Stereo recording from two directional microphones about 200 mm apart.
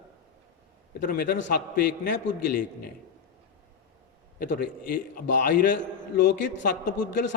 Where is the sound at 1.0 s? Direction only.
50° left (ahead or behind).